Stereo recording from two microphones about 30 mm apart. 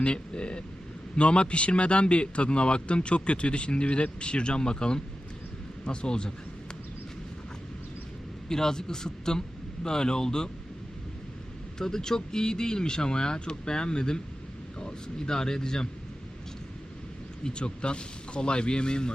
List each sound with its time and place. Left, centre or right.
0.0 s a man's voice: left
8.4 s speech: left
11.8 s speech: centre
17.4 s a man's voice: left